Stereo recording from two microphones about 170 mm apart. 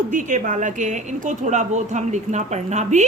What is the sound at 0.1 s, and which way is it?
A woman's voice, 45° right (ahead or behind).